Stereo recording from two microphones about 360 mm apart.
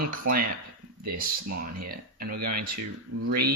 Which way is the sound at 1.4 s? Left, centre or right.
Right.